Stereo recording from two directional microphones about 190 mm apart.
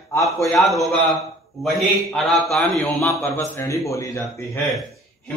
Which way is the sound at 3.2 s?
15° left (ahead or behind).